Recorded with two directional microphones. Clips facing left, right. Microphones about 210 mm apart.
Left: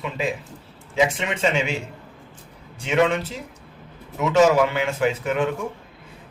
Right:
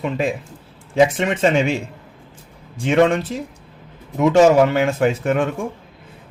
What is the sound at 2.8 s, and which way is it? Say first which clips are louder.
Speech: right 5 dB; 50° right (ahead or behind).